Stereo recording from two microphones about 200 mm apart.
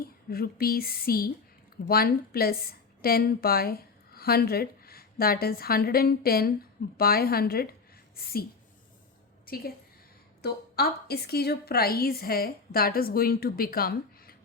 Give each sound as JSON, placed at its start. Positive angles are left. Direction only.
{"t": 0.3, "sound": "a woman's voice", "side_deg": 50}
{"t": 9.5, "sound": "a woman's voice", "side_deg": 50}